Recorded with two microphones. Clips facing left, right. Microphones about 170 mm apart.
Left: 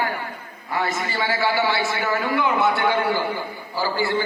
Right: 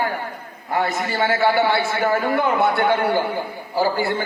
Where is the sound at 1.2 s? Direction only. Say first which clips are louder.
Right 4 dB; 50° right (ahead or behind).